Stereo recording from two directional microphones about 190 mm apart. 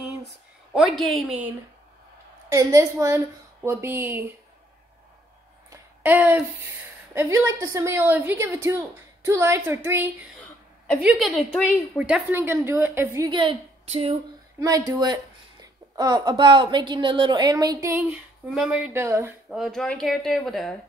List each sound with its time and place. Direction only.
0.7 s speech: centre (ahead or behind)
2.5 s a woman's voice: 15° right (ahead or behind)
5.7 s a sound: 10° right (ahead or behind)
7.2 s a woman's voice: 15° right (ahead or behind)
11.1 s speech: centre (ahead or behind)
12.0 s a woman's voice: 10° right (ahead or behind); by 14.1 s 30° right (ahead or behind)
14.6 s a woman's voice: 20° right (ahead or behind)
19.5 s speech: centre (ahead or behind)